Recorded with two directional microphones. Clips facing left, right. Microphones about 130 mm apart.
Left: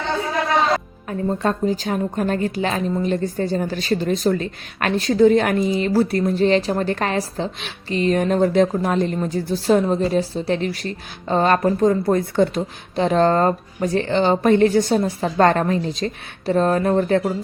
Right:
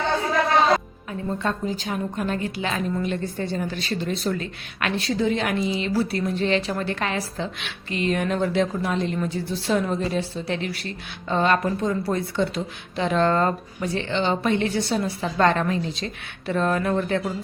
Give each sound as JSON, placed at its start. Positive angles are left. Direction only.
{"t": 1.3, "sound": "a woman's voice", "side_deg": 40}